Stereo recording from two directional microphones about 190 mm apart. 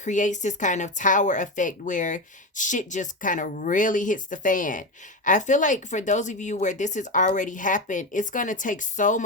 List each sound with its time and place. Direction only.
0.0 s speech: 40° left (ahead or behind)